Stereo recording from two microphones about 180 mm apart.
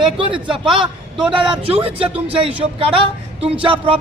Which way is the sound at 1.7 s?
30° right (ahead or behind).